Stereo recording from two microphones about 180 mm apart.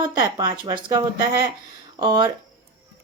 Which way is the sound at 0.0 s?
25° right (ahead or behind).